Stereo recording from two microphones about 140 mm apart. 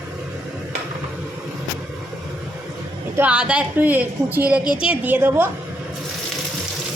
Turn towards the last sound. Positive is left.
turn(degrees=-15)  # may be behind; listen again after turning